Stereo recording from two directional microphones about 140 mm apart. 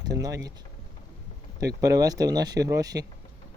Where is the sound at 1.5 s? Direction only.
25° right (ahead or behind).